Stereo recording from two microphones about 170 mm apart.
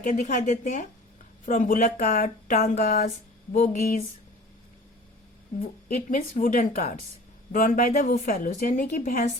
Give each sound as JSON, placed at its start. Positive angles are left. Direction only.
{"t": 0.0, "sound": "a woman's voice", "side_deg": 45}
{"t": 5.9, "sound": "a woman's voice", "side_deg": 50}